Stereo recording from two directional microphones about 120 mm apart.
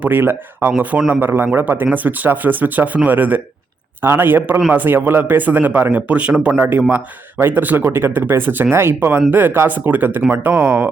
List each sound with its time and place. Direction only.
0.0 s a man's voice: 15° right (ahead or behind)